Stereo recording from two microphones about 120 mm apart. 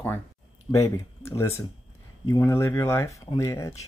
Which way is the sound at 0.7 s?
25° left (ahead or behind).